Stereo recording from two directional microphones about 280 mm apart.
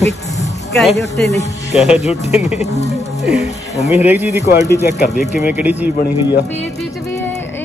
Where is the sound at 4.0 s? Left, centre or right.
Centre.